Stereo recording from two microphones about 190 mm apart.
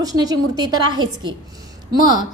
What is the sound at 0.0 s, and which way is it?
A woman's voice, 20° right (ahead or behind).